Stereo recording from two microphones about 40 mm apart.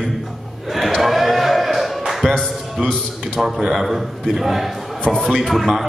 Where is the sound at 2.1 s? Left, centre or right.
Centre.